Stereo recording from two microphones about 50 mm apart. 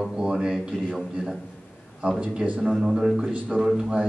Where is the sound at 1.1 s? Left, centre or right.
Centre.